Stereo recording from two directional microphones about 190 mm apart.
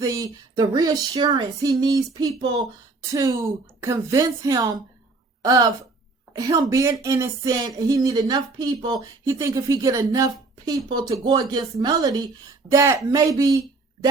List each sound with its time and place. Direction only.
0.0 s a woman's voice: 15° right (ahead or behind)